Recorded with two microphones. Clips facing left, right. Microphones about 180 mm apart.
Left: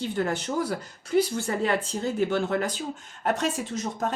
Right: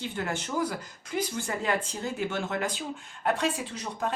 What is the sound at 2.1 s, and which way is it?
Speech, 40° left (ahead or behind).